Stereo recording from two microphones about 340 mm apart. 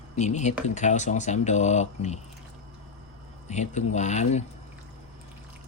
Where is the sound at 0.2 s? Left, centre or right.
Left.